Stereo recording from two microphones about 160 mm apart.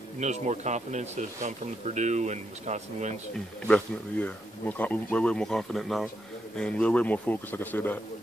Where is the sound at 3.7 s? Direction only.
10° left (ahead or behind).